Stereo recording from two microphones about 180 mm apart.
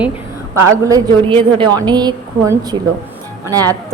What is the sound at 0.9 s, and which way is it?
A woman's voice, 20° right (ahead or behind).